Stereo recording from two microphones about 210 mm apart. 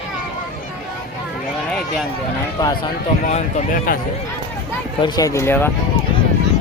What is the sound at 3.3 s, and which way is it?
Speech, 35° left (ahead or behind).